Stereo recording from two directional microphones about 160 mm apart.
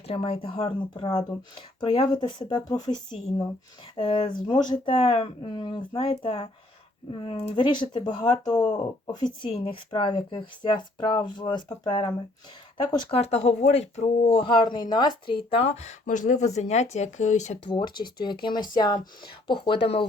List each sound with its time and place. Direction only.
0.1 s speech: 35° left (ahead or behind)
17.7 s speech: 30° left (ahead or behind)